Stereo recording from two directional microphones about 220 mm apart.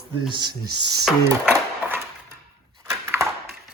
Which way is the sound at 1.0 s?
5° right (ahead or behind).